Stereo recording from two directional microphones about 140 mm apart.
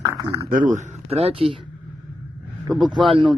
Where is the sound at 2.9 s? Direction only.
35° right (ahead or behind).